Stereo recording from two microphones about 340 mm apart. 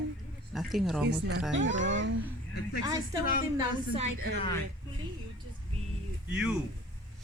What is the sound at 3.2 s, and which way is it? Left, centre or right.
Speech, left.